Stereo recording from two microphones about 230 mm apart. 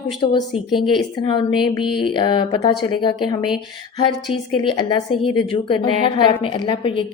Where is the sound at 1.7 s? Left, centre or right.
Left.